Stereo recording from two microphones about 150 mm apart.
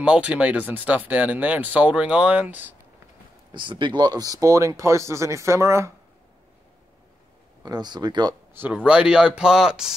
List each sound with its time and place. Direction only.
0.0 s speech: 5° right (ahead or behind)
3.5 s speech: 35° right (ahead or behind)
7.6 s speech: 25° right (ahead or behind)
8.5 s speech: 10° right (ahead or behind)